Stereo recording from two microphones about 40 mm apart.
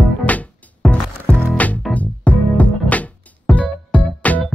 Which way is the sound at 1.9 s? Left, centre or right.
Left.